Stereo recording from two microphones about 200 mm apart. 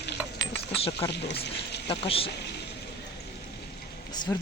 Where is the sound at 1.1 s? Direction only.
55° left (ahead or behind).